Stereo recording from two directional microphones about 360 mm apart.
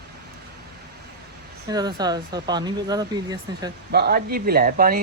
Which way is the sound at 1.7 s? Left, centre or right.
Centre.